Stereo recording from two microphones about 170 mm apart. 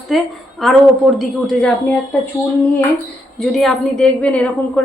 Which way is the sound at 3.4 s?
Centre (ahead or behind).